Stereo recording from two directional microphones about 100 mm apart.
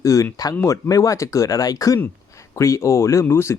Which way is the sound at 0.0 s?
35° left (ahead or behind).